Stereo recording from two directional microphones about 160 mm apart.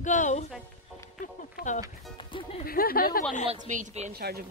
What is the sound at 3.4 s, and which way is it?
Speech, 45° right (ahead or behind).